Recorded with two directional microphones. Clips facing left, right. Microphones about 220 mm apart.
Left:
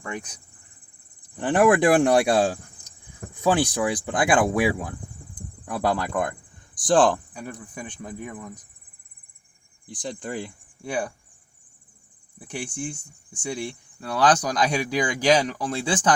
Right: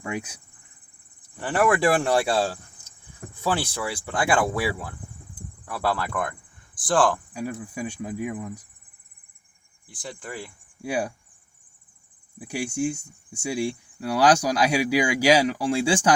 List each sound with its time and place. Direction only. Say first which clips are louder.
0.0 s speech: right 3 dB; 10° right (ahead or behind)
1.4 s speech: left 4 dB; 20° left (ahead or behind)
7.7 s speech: right 5 dB; 10° right (ahead or behind)
9.9 s speech: left 5 dB; 20° left (ahead or behind)
10.8 s speech: right 1 dB; 10° right (ahead or behind)
12.4 s speech: right 6 dB; 10° right (ahead or behind)